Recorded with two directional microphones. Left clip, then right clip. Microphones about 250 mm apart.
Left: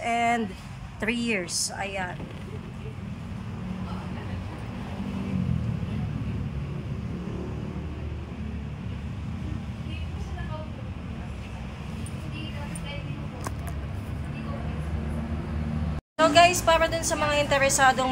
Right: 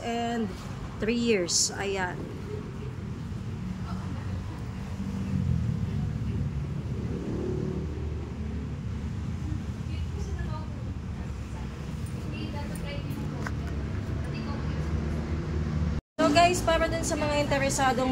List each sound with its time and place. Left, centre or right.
0.0 s a sound: centre
1.0 s a woman's voice: centre
16.2 s a woman's voice: centre